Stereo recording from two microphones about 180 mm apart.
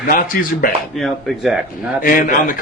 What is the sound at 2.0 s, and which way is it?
Speech, 50° left (ahead or behind).